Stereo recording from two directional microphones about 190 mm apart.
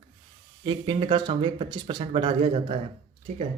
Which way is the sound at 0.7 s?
25° right (ahead or behind).